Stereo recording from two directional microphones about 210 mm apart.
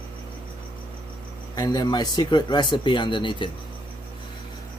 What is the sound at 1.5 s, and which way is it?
Speech, 20° left (ahead or behind).